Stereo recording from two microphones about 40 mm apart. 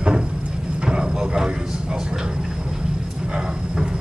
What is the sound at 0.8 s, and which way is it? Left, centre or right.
Vehicle, right.